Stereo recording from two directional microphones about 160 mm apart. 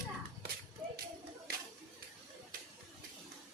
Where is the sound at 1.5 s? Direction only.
75° right (ahead or behind).